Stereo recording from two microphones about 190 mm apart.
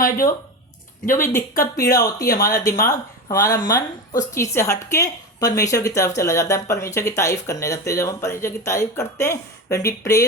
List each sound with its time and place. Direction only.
0.0 s speech: 50° left (ahead or behind)
2.5 s speech: 15° left (ahead or behind)